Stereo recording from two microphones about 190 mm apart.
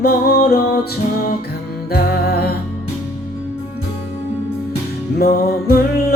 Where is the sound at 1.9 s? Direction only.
55° left (ahead or behind).